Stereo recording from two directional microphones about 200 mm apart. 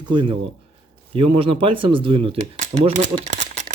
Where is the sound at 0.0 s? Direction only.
25° right (ahead or behind).